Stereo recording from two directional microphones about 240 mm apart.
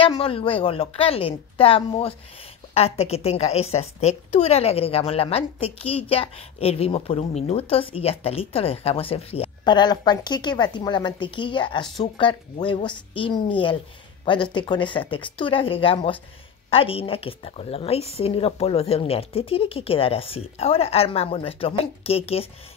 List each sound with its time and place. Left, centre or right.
0.0 s a woman's voice: left